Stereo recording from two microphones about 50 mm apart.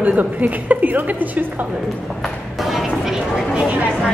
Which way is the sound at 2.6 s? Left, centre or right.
Centre.